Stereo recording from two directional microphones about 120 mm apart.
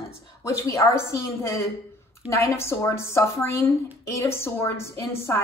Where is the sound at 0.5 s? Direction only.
25° left (ahead or behind).